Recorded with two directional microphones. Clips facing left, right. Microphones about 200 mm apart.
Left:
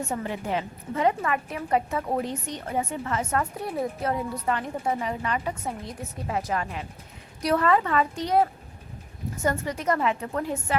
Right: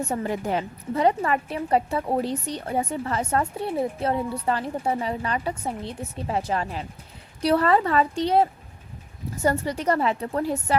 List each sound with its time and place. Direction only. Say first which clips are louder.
0.1 s a woman's voice: right 3 dB; 40° right (ahead or behind)